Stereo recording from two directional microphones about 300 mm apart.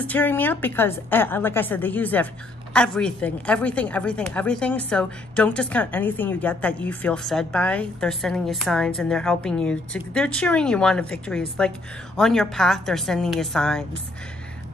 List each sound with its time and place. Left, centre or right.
0.0 s a woman's voice: centre